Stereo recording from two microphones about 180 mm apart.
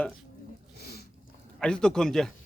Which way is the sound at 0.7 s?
60° left (ahead or behind).